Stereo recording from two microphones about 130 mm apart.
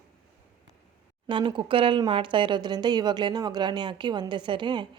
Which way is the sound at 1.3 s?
40° right (ahead or behind).